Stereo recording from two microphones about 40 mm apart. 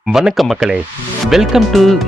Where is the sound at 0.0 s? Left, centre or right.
Centre.